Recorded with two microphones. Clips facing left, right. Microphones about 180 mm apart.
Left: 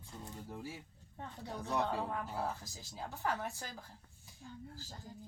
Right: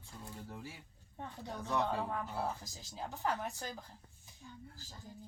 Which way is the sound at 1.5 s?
15° left (ahead or behind).